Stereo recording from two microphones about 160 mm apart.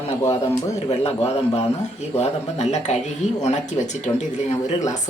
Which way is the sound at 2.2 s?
45° left (ahead or behind).